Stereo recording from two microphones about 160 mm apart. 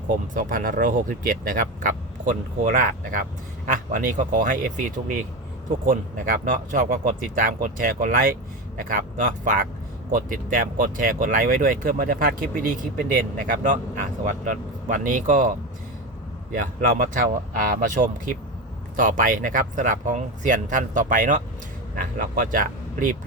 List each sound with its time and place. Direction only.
0.3 s speech: 60° right (ahead or behind)
16.6 s speech: 60° right (ahead or behind)